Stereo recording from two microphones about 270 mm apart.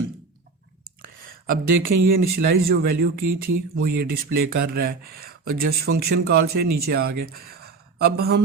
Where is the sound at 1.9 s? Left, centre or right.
Right.